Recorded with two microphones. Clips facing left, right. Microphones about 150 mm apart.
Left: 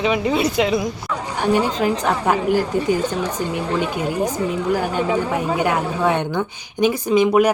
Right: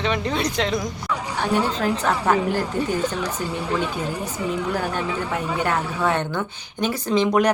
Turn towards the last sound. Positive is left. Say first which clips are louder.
# left 4 dB
turn(degrees=10)  # may be behind; listen again after turning